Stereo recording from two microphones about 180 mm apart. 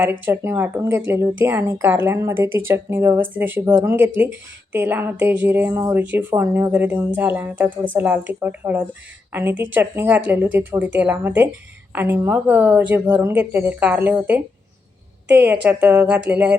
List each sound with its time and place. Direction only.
0.0 s speech: 10° right (ahead or behind)